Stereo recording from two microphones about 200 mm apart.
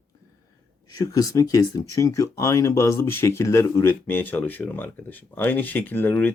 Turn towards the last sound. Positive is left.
turn(degrees=10)  # may be behind; listen again after turning